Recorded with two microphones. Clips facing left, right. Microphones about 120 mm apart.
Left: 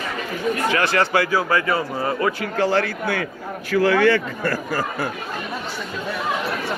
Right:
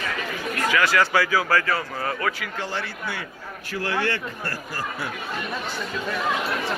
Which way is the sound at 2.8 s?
55° left (ahead or behind).